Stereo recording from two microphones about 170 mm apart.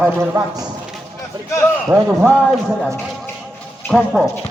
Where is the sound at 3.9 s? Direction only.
Centre (ahead or behind).